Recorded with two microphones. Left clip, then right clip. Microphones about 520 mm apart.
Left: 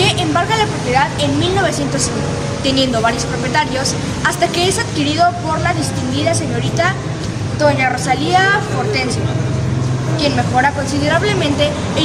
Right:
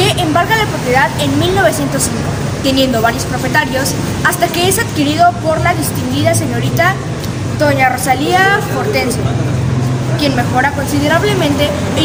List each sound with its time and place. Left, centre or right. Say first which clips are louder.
0.0 s vehicle: right 3 dB; left
2.6 s speech: right 3 dB; left
7.6 s speech: right 2 dB; left
10.2 s speech: right 1 dB; left